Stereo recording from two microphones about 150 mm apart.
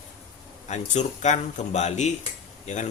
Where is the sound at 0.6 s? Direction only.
50° left (ahead or behind).